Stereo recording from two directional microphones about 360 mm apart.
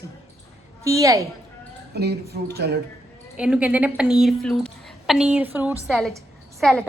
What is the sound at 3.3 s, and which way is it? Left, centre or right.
A woman's voice, centre.